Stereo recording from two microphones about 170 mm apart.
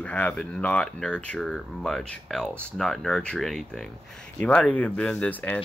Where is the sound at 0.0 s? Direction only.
5° left (ahead or behind).